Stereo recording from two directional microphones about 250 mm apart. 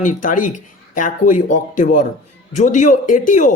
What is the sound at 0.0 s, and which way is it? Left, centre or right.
Speech, left.